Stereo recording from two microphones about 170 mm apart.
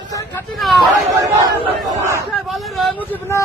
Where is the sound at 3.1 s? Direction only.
15° left (ahead or behind).